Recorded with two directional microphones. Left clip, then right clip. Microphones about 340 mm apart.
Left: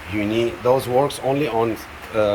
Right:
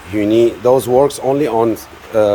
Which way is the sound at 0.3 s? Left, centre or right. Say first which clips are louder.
Right 7 dB; centre.